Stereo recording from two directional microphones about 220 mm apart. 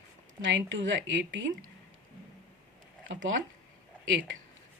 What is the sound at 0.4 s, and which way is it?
A woman's voice, 55° right (ahead or behind).